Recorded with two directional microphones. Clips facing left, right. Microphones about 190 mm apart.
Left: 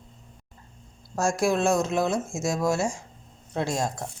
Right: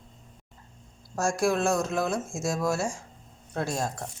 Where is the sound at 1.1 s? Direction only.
25° left (ahead or behind).